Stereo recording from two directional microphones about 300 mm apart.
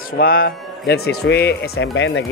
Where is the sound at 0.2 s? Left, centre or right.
Left.